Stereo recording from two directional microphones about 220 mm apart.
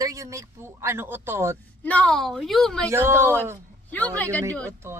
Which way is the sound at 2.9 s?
10° right (ahead or behind).